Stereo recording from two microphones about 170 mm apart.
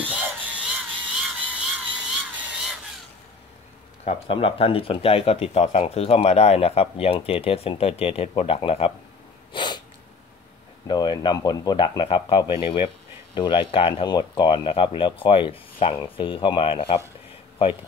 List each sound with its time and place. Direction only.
0.0 s a sound: 10° right (ahead or behind)
4.0 s speech: 35° left (ahead or behind)
9.5 s snort: 30° left (ahead or behind)
10.9 s speech: 25° left (ahead or behind)